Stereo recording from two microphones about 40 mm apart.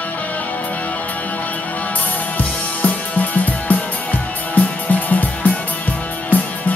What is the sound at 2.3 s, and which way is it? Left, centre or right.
Music, left.